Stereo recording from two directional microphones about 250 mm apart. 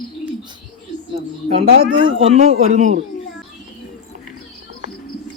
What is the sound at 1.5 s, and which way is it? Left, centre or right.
Speech, right.